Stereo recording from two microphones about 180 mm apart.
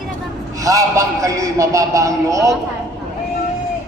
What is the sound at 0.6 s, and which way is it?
A man's voice, 20° right (ahead or behind).